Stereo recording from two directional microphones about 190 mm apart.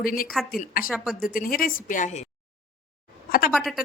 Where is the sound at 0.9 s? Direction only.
5° right (ahead or behind).